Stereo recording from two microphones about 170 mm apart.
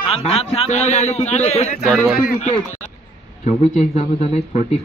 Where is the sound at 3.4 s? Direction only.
40° left (ahead or behind).